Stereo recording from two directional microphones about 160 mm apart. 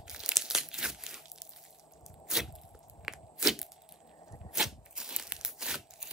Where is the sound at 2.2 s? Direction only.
Centre (ahead or behind).